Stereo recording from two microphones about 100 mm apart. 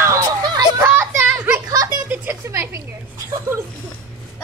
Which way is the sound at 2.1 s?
25° right (ahead or behind).